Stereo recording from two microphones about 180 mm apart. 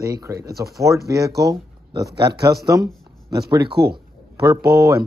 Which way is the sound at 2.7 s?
20° right (ahead or behind).